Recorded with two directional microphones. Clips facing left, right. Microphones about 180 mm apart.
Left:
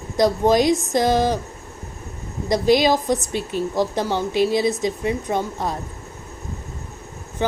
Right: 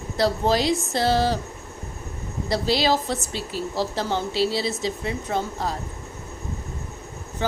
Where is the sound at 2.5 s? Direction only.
15° left (ahead or behind).